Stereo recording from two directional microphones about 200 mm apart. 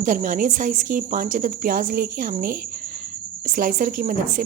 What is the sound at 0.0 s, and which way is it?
A woman's voice, 40° right (ahead or behind).